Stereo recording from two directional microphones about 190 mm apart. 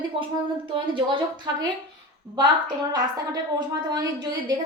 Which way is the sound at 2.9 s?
20° right (ahead or behind).